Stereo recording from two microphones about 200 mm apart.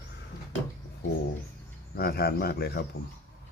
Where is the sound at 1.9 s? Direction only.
50° left (ahead or behind).